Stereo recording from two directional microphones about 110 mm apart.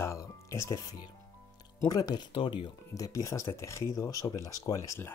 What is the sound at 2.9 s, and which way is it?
Speech, 30° left (ahead or behind).